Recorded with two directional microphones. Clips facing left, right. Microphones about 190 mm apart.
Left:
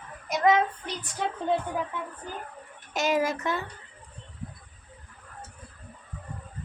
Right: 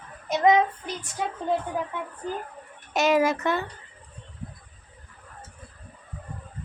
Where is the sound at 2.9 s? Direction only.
70° right (ahead or behind).